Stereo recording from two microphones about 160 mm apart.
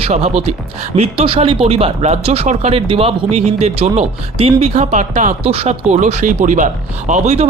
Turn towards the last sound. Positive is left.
turn(degrees=-40)  # may be behind; listen again after turning